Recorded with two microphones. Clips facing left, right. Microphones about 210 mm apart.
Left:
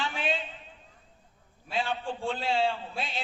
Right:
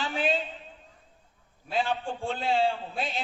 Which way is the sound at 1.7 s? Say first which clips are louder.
Right 2 dB; 45° right (ahead or behind).